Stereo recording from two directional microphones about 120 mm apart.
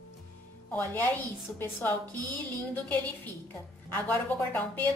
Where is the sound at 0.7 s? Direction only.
15° left (ahead or behind).